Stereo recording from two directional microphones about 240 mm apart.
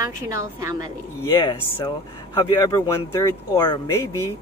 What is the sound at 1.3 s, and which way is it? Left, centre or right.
Speech, centre.